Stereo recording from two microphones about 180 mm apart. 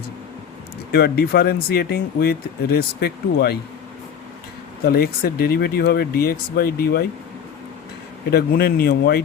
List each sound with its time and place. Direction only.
0.9 s speech: 60° left (ahead or behind)
4.9 s speech: 60° left (ahead or behind)
8.3 s speech: 60° left (ahead or behind)